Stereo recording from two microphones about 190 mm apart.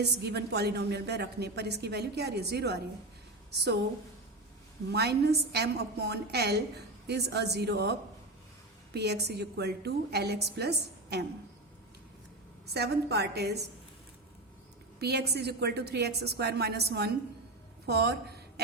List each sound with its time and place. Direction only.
0.0 s a woman's voice: 60° right (ahead or behind)
4.9 s a woman's voice: 60° right (ahead or behind)
12.7 s a woman's voice: 60° right (ahead or behind)
15.0 s a woman's voice: 60° right (ahead or behind)
17.8 s a sound: 55° right (ahead or behind)